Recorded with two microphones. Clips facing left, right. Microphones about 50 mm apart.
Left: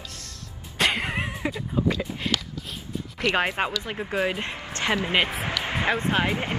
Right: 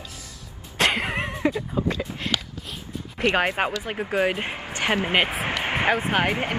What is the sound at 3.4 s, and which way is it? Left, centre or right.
Speech, centre.